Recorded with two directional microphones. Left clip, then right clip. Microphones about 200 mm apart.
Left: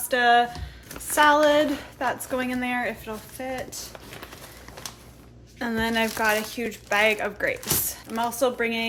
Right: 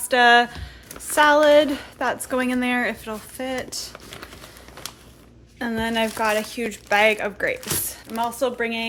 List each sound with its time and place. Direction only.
0.1 s a woman's voice: 30° right (ahead or behind)
1.1 s a woman's voice: 20° right (ahead or behind)
5.5 s speech: 15° right (ahead or behind)